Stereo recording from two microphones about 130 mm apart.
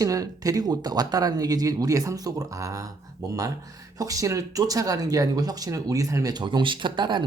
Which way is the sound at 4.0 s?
25° right (ahead or behind).